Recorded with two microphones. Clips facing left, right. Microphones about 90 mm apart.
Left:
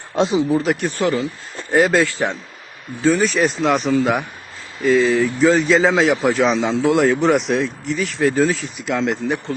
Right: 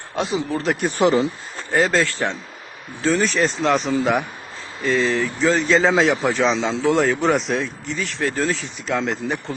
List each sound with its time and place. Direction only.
0.2 s speech: 20° left (ahead or behind)
0.5 s a man's voice: centre (ahead or behind)
0.9 s speech: 20° right (ahead or behind)
1.7 s speech: 15° left (ahead or behind)
3.0 s a man's voice: 5° left (ahead or behind)